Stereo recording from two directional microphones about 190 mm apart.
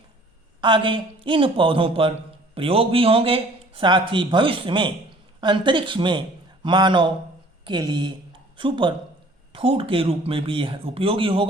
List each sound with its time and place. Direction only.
0.6 s a man's voice: 25° right (ahead or behind)